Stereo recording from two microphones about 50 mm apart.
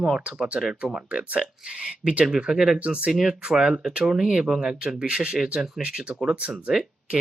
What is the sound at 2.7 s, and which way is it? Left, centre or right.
Speech, right.